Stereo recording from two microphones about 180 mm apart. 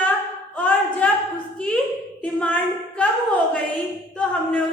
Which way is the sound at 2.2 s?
10° left (ahead or behind).